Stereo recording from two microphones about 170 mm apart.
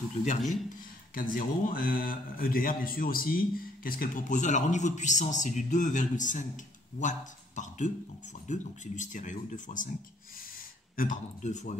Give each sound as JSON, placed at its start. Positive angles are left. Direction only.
{"t": 0.4, "sound": "speech", "side_deg": 0}
{"t": 1.3, "sound": "a man's voice", "side_deg": 55}
{"t": 11.0, "sound": "a man's voice", "side_deg": 50}